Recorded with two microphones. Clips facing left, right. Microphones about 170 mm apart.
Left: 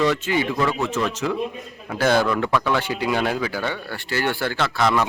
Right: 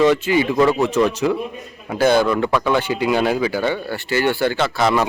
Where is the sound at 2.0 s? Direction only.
Centre (ahead or behind).